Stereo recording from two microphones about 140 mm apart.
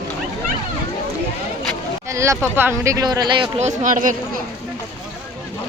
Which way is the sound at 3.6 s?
60° right (ahead or behind).